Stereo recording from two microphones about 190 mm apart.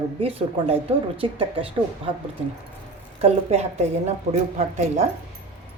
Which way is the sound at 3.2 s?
35° right (ahead or behind).